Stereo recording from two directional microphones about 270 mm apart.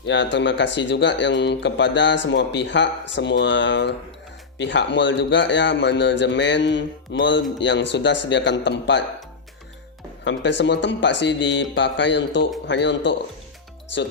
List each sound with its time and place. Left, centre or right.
0.0 s a man's voice: left
10.3 s a man's voice: left